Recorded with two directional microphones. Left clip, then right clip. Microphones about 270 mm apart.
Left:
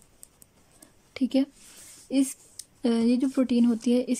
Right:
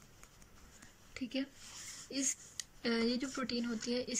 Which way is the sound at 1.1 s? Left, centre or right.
Centre.